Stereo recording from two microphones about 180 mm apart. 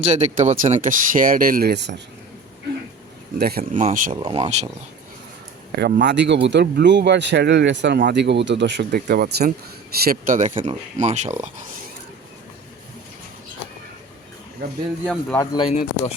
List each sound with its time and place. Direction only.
0.0 s speech: 40° right (ahead or behind); by 2.0 s 70° right (ahead or behind)
3.3 s speech: 60° right (ahead or behind)
3.6 s speech: 40° right (ahead or behind)
5.7 s speech: 65° right (ahead or behind); by 11.3 s 40° right (ahead or behind)
15.0 s speech: 5° left (ahead or behind)
15.4 s speech: 25° left (ahead or behind)
15.7 s speech: 40° left (ahead or behind)